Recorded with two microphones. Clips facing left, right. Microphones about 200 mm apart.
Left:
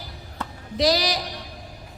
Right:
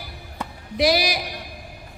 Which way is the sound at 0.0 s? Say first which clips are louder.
Right 1 dB; 10° right (ahead or behind).